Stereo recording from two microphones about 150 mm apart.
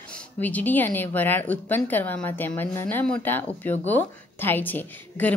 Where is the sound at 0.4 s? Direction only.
10° left (ahead or behind).